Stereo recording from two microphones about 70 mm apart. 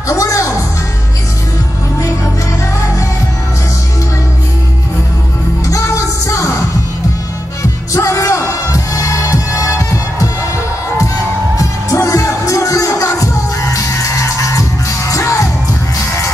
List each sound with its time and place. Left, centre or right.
0.1 s music: left
5.7 s music: left
7.9 s music: left
11.5 s music: left